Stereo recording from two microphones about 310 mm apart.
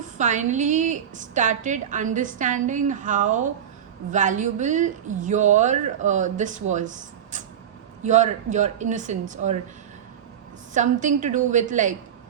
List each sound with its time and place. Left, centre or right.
0.2 s a woman's voice: right
8.0 s a woman's voice: right
10.8 s a woman's voice: right